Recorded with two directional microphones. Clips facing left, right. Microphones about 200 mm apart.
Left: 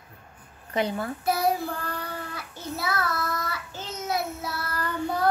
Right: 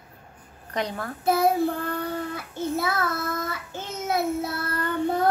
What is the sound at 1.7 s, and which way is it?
Child singing, 25° right (ahead or behind).